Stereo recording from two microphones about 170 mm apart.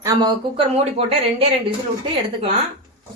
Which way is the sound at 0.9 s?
35° right (ahead or behind).